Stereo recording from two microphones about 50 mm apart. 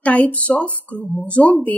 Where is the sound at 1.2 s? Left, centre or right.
Left.